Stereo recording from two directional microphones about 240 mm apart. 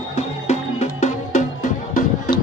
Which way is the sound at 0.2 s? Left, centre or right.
Left.